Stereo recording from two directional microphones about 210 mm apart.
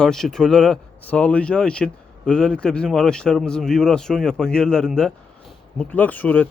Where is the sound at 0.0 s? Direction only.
Centre (ahead or behind).